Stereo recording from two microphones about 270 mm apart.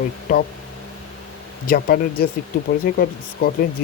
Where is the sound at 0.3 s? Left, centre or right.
Left.